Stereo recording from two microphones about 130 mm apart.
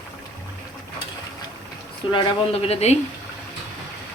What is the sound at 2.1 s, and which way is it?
Speech, 35° left (ahead or behind).